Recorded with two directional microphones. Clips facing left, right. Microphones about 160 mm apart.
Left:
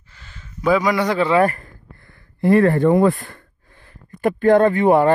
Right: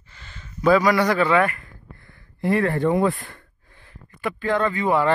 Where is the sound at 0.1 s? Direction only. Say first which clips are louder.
Even; 5° left (ahead or behind); by 1.4 s 25° left (ahead or behind).